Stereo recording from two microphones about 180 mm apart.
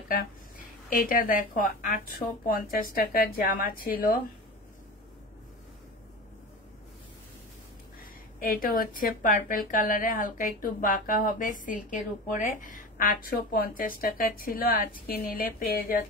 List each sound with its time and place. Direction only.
0.8 s a woman's voice: 50° left (ahead or behind)
8.0 s a woman's voice: 50° left (ahead or behind)